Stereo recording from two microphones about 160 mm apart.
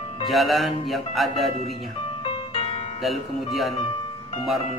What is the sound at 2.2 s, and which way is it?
Music, 35° left (ahead or behind).